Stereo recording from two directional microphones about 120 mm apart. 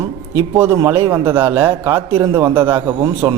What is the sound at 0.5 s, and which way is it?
A man's voice, 20° right (ahead or behind).